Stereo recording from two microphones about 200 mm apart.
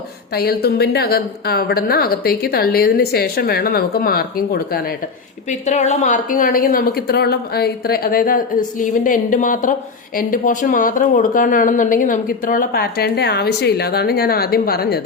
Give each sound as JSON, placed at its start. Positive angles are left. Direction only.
{"t": 0.3, "sound": "speech", "side_deg": 50}
{"t": 5.5, "sound": "speech", "side_deg": 35}